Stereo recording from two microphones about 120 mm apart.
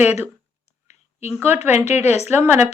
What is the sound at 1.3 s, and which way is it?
A woman's voice, 20° right (ahead or behind).